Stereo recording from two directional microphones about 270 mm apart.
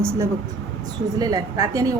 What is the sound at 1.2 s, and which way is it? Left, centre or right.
Speech, centre.